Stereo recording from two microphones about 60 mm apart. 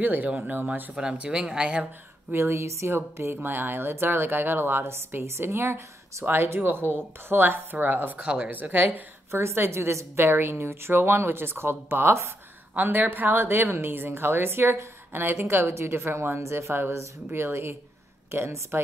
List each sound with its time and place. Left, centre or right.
0.0 s speech: right
0.9 s speech: centre
2.3 s a woman's voice: right
3.4 s speech: right
9.3 s a woman's voice: right
12.7 s a woman's voice: right